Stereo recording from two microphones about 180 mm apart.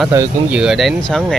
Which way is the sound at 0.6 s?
Centre (ahead or behind).